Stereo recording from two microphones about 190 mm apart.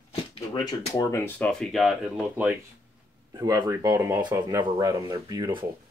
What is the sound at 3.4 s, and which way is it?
Speech, 20° right (ahead or behind).